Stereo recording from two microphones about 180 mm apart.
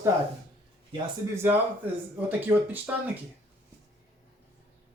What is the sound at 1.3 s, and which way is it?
Speech, 15° right (ahead or behind).